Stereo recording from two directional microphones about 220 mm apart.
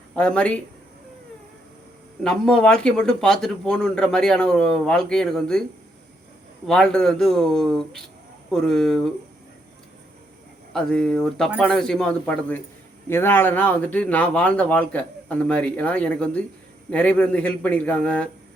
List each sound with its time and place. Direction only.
0.2 s speech: 5° left (ahead or behind)
2.2 s speech: 5° left (ahead or behind)
6.7 s speech: centre (ahead or behind)
10.7 s speech: 5° left (ahead or behind)